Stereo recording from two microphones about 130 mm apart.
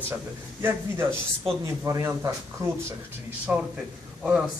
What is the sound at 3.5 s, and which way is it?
Speech, 15° right (ahead or behind).